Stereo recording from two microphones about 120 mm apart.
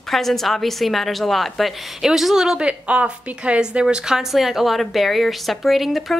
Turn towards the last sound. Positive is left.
turn(degrees=0)  # may be behind; listen again after turning